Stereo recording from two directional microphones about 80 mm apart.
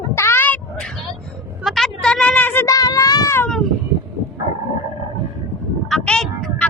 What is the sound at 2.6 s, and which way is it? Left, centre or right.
Speech, left.